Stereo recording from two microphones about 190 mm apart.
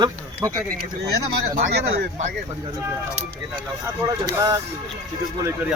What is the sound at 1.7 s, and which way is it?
Speech, 60° right (ahead or behind).